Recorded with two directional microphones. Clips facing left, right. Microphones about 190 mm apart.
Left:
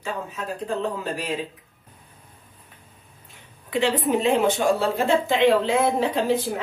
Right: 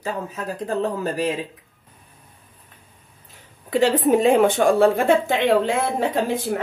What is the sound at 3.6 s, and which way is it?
A woman's voice, 40° right (ahead or behind).